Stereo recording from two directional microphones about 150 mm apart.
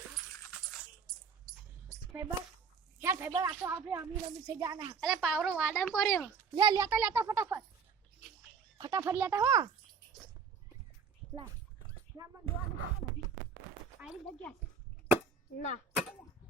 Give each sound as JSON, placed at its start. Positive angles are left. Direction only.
{"t": 3.0, "sound": "a woman's voice", "side_deg": -15}
{"t": 4.9, "sound": "speech", "side_deg": -5}
{"t": 6.5, "sound": "speech", "side_deg": -30}
{"t": 6.7, "sound": "speech", "side_deg": -15}
{"t": 8.8, "sound": "speech", "side_deg": -25}
{"t": 15.5, "sound": "speech", "side_deg": 60}